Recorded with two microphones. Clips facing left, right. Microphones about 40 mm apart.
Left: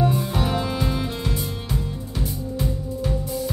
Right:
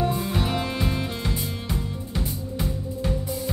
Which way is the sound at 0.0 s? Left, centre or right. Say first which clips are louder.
Left 3 dB; centre.